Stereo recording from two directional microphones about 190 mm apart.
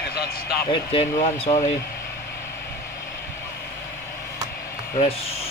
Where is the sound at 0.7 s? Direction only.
30° left (ahead or behind).